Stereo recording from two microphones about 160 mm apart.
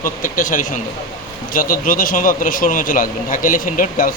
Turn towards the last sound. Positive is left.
turn(degrees=60)  # may be behind; listen again after turning